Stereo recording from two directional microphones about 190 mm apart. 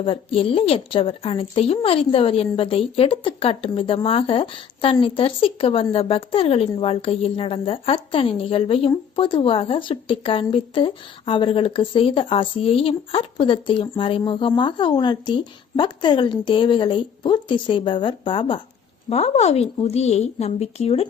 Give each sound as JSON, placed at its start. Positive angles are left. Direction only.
{"t": 0.0, "sound": "a woman's voice", "side_deg": 30}